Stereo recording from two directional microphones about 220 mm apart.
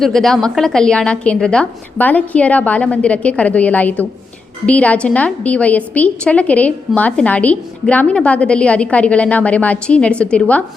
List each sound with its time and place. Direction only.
0.0 s a woman's voice: centre (ahead or behind)